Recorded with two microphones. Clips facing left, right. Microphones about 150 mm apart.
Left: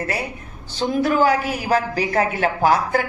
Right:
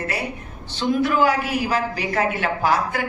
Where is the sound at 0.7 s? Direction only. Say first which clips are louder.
Left 1 dB; 40° left (ahead or behind).